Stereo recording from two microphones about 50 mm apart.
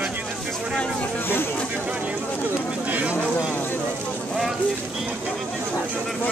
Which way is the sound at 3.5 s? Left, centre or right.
Left.